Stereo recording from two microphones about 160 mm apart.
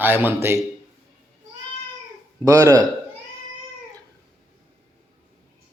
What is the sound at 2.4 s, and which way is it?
Speech, 20° right (ahead or behind).